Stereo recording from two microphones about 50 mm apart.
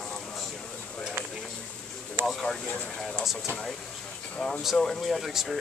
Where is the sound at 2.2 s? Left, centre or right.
Right.